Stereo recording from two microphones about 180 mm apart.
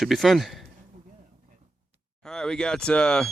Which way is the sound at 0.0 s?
Centre (ahead or behind).